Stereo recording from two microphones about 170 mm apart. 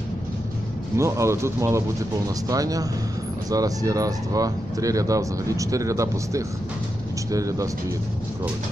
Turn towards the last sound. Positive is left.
turn(degrees=-20)  # may be behind; listen again after turning